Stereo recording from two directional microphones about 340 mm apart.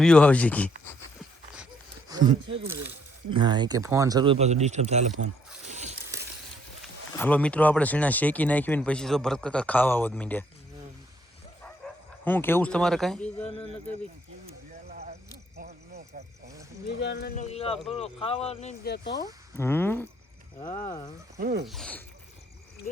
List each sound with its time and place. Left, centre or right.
0.0 s speech: centre
2.0 s a sound: centre
2.6 s speech: right
3.2 s speech: centre
5.6 s a sound: right
7.2 s speech: centre
12.2 s speech: centre
14.8 s a sound: right
16.1 s wild animals: centre
17.0 s speech: left
19.1 s speech: centre
21.3 s speech: right
21.7 s speech: centre